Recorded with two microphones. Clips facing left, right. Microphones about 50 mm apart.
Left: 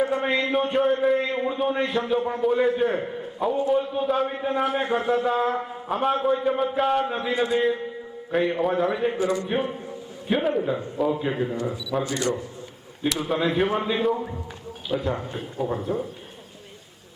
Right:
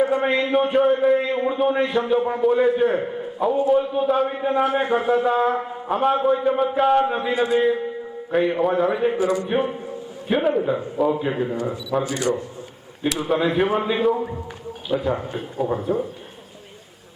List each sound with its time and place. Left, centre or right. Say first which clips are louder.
0.0 s a man's voice: right 3 dB; centre
9.5 s a man's voice: right 4 dB; centre
12.0 s a man's voice: right 2 dB; right
13.1 s a man's voice: right 3 dB; centre